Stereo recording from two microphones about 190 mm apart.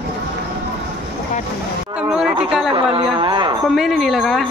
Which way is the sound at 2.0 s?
5° right (ahead or behind).